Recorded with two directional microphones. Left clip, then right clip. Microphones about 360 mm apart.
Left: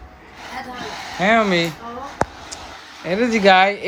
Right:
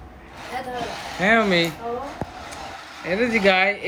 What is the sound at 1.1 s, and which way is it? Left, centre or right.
Speech, centre.